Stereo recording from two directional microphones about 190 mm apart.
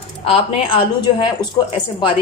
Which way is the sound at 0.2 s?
30° left (ahead or behind).